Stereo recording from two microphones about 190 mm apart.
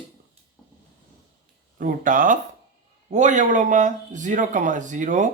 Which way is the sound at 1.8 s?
45° right (ahead or behind).